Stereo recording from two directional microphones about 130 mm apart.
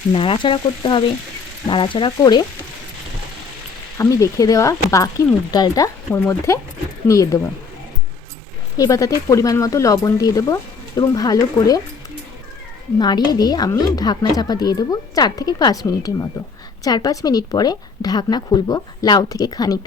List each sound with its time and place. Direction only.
0.1 s speech: 45° left (ahead or behind)
3.9 s speech: 25° left (ahead or behind)
8.8 s speech: 25° left (ahead or behind)
13.0 s speech: 35° left (ahead or behind)